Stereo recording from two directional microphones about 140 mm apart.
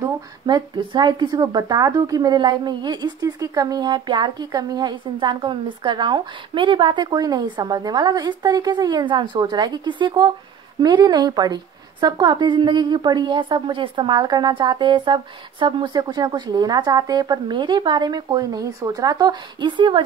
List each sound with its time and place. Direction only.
0.0 s a woman's voice: 30° right (ahead or behind)